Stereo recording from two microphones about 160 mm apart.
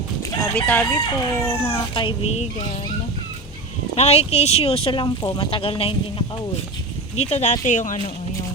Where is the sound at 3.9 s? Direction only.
40° left (ahead or behind).